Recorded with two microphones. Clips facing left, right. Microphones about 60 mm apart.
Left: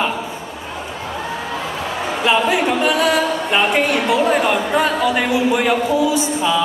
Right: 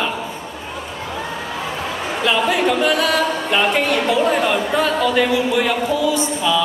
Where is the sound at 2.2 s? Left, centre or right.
Centre.